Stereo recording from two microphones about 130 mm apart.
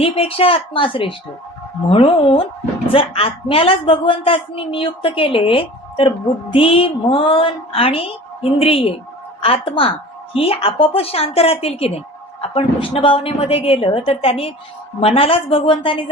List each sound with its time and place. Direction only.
0.0 s a woman's voice: 45° left (ahead or behind)